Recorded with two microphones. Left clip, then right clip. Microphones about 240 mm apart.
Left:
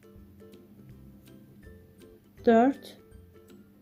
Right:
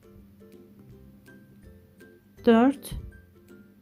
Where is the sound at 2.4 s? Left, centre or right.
Centre.